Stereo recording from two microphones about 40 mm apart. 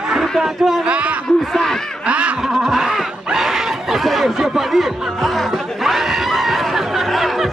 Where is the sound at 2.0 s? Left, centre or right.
Right.